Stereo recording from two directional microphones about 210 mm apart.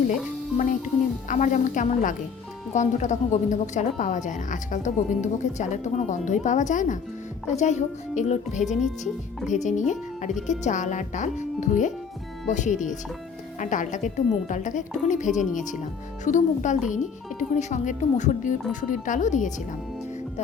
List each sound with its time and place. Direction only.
0.1 s a woman's voice: 35° left (ahead or behind)
8.6 s speech: centre (ahead or behind)
9.5 s a woman's voice: 35° left (ahead or behind)